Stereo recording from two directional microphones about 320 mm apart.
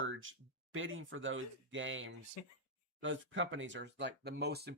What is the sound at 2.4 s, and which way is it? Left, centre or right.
Speech, left.